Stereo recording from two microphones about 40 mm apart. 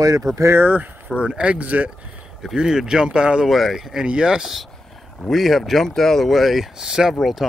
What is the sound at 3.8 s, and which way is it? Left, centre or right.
Speech, centre.